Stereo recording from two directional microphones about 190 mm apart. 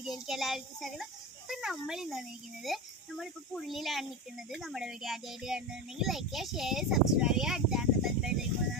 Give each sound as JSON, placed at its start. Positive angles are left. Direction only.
{"t": 0.0, "sound": "a child's voice", "side_deg": 0}